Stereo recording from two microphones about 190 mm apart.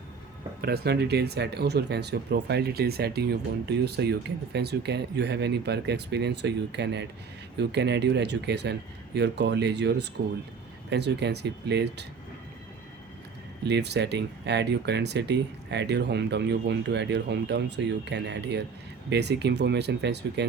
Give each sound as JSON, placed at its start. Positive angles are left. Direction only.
{"t": 0.6, "sound": "speech", "side_deg": -60}
{"t": 13.7, "sound": "speech", "side_deg": -65}